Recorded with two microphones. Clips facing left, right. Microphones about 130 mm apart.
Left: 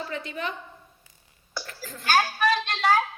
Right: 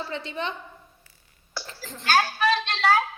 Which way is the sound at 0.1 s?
25° right (ahead or behind).